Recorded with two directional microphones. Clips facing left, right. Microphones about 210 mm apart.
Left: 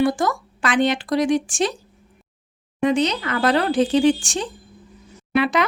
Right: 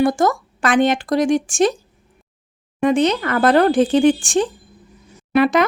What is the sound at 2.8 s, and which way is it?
Speech, 50° right (ahead or behind).